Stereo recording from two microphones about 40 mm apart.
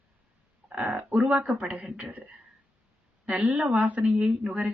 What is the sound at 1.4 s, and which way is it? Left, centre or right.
Speech, right.